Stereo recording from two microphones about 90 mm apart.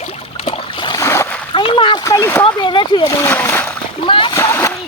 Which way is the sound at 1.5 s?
70° left (ahead or behind).